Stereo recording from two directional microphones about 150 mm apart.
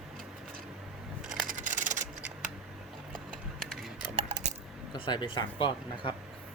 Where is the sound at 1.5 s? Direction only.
60° right (ahead or behind).